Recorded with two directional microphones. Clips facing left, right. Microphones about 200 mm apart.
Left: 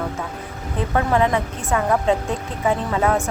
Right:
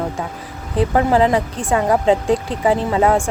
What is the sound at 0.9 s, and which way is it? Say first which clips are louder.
A woman's voice: right 3 dB; 30° right (ahead or behind).